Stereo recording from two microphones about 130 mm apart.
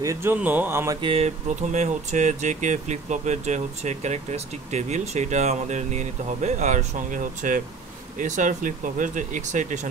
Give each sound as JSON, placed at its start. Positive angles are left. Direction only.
{"t": 0.0, "sound": "speech", "side_deg": -20}
{"t": 1.0, "sound": "speech", "side_deg": -50}